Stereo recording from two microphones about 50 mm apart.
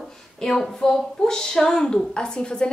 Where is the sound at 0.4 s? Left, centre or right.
Centre.